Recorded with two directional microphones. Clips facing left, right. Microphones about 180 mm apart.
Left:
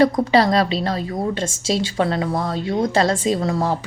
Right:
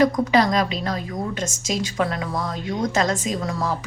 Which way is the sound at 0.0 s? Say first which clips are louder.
Left 2 dB; 30° left (ahead or behind).